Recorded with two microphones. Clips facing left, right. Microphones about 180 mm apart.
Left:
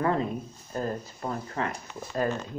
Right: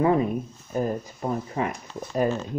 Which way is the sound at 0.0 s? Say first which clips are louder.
Right 5 dB; 15° right (ahead or behind).